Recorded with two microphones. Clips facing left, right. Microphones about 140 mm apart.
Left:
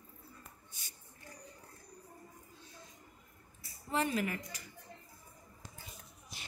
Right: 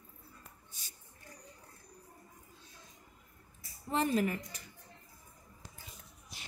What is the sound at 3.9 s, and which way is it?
Speech, 40° right (ahead or behind).